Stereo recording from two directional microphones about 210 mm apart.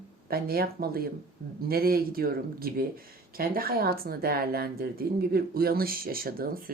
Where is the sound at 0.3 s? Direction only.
45° right (ahead or behind).